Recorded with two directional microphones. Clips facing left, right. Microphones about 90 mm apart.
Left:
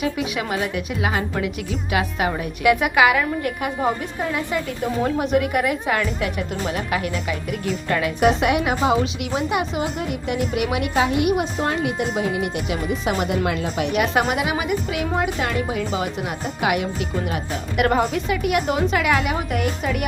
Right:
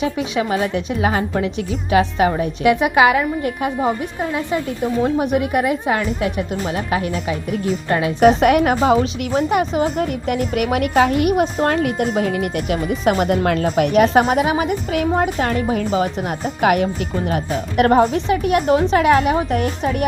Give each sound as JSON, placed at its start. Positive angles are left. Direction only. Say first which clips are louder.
{"t": 0.0, "sound": "a woman's voice", "louder": "right 4 dB", "side_deg": -30}
{"t": 8.2, "sound": "a woman's voice", "louder": "right 7 dB", "side_deg": -45}